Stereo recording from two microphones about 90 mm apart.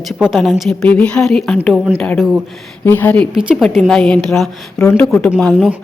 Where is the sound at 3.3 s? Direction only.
5° right (ahead or behind).